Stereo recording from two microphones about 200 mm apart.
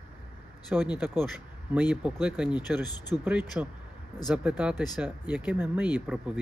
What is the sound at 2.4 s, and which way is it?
Speech, 20° left (ahead or behind).